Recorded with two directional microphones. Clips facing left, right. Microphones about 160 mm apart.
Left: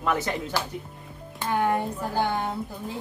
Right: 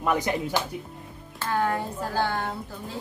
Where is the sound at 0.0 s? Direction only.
15° right (ahead or behind).